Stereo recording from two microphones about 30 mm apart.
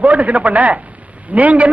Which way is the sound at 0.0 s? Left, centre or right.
Right.